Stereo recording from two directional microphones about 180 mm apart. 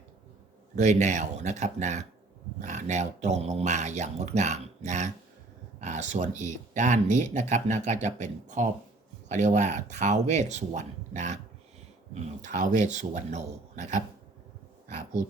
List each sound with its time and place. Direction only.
0.8 s speech: 40° right (ahead or behind)